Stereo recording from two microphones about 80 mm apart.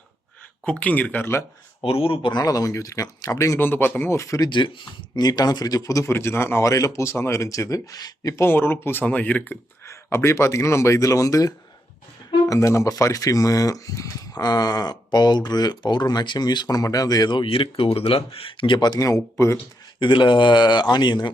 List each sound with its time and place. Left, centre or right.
0.6 s speech: centre
2.0 s speech: left
2.4 s speech: left
3.6 s speech: left
4.2 s speech: left
4.4 s speech: left
6.1 s speech: left
8.4 s speech: left
9.8 s speech: left
18.9 s speech: left
20.0 s speech: left